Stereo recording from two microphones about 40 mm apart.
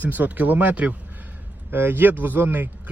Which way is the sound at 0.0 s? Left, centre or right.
Right.